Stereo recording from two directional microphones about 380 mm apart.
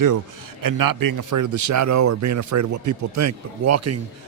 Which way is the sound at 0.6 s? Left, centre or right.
Right.